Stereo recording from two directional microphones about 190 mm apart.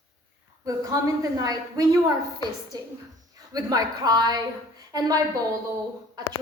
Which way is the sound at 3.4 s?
20° right (ahead or behind).